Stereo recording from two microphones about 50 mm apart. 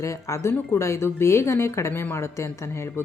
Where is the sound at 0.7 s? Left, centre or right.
Left.